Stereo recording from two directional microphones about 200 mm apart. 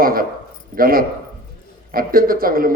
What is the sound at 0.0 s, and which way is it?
A man's voice, 45° right (ahead or behind).